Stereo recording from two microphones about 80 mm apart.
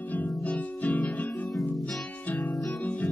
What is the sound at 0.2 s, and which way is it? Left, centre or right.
Music, centre.